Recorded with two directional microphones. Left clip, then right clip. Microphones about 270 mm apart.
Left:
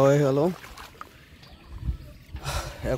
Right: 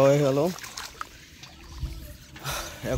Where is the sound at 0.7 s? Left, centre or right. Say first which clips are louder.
Right 5 dB; right.